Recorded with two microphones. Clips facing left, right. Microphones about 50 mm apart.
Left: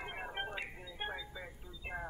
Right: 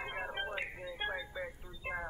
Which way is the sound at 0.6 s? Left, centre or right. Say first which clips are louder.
Right 4 dB; right.